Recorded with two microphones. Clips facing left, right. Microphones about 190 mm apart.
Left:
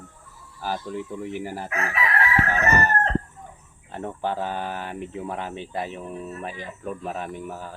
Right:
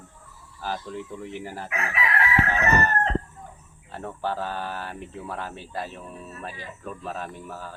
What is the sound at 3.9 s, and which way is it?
Speech, 20° left (ahead or behind).